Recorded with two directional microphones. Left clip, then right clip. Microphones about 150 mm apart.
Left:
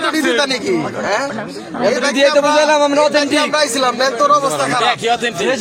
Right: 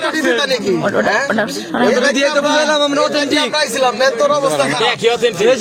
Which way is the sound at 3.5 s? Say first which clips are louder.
Even; 30° left (ahead or behind).